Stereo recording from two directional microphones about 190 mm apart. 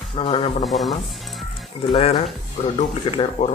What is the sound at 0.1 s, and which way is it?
Speech, 30° left (ahead or behind).